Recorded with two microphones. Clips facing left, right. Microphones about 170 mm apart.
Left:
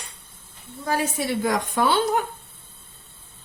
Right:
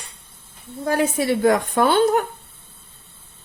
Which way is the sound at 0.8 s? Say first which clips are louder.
Right 5 dB; 55° right (ahead or behind).